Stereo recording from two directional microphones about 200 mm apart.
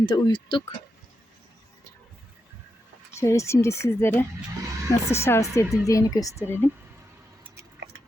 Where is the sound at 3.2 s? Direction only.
15° left (ahead or behind).